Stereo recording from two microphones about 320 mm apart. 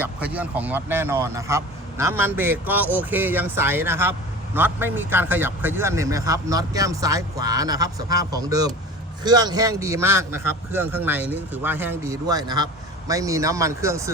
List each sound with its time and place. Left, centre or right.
0.0 s speech: centre